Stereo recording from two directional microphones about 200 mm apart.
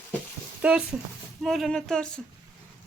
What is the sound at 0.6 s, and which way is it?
Speech, 5° right (ahead or behind).